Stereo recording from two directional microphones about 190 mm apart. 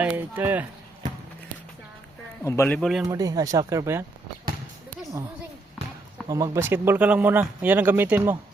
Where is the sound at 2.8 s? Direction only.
Centre (ahead or behind).